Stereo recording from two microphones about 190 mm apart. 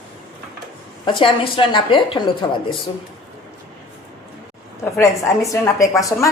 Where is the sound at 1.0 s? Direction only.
25° left (ahead or behind).